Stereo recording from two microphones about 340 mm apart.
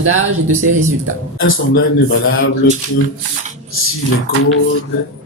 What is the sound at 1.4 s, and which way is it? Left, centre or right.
Speech, left.